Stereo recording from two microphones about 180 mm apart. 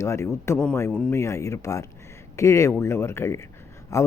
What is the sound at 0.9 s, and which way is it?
Speech, 5° left (ahead or behind).